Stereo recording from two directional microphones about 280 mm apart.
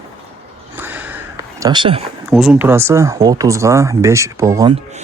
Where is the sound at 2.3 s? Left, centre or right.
Centre.